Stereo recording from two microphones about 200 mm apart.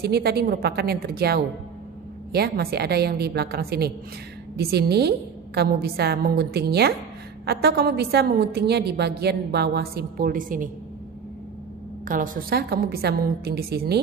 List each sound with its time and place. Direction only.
0.0 s a woman's voice: 50° right (ahead or behind)
12.1 s a woman's voice: 45° right (ahead or behind)